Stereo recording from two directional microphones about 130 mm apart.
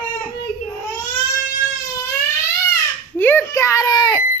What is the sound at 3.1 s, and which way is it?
Speech, 15° left (ahead or behind).